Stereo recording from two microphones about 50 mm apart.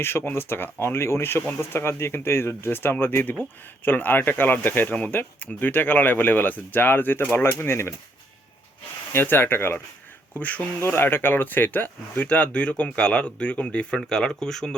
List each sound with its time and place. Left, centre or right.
0.0 s speech: left
9.1 s speech: left
10.3 s speech: left
10.8 s speech: left
14.0 s speech: centre